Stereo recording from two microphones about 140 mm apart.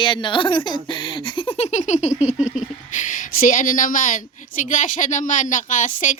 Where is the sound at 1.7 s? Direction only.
55° left (ahead or behind).